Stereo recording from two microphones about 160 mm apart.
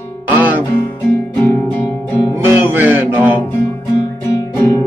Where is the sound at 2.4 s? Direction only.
15° right (ahead or behind).